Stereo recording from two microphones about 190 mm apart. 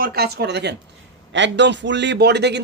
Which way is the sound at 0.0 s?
55° right (ahead or behind).